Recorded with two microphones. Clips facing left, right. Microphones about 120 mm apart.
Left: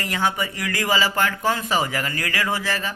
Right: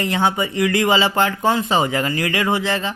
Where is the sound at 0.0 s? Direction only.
25° right (ahead or behind).